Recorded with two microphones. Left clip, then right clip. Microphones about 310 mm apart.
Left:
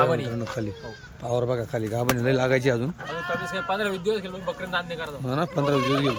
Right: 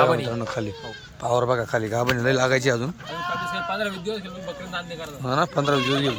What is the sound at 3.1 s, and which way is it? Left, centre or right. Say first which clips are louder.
Speech: right 2 dB; right.